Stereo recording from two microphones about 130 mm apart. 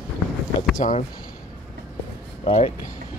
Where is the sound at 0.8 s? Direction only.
60° left (ahead or behind).